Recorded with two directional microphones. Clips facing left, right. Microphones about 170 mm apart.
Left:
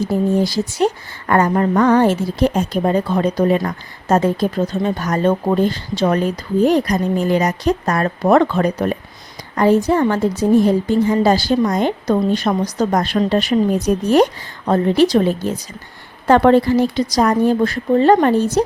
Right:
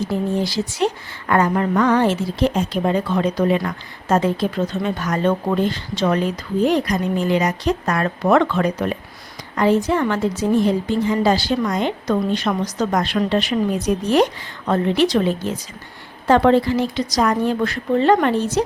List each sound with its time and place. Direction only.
0.1 s a woman's voice: 45° left (ahead or behind)
16.2 s a woman's voice: 50° left (ahead or behind)